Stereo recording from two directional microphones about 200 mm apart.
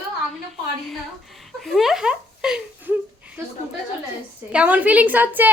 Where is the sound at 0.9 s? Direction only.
Centre (ahead or behind).